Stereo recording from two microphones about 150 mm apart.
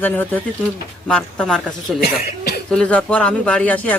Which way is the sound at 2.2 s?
90° left.